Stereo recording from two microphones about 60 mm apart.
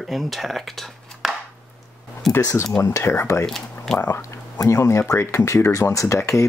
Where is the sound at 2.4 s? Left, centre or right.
Left.